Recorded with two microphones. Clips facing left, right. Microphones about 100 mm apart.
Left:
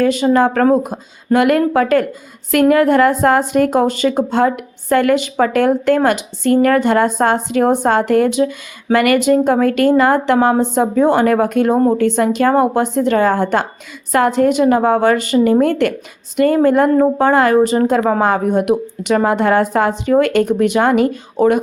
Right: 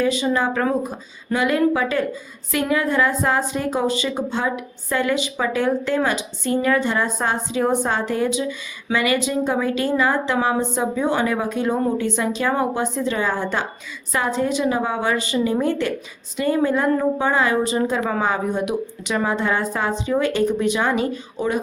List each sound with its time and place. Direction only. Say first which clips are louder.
0.0 s a woman's voice: left 7 dB; 50° left (ahead or behind)
0.8 s a woman's voice: left 5 dB; 60° left (ahead or behind)
10.3 s a woman's voice: left 7 dB; 45° left (ahead or behind)